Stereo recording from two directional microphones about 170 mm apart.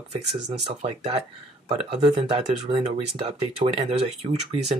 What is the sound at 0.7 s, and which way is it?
Speech, 35° right (ahead or behind).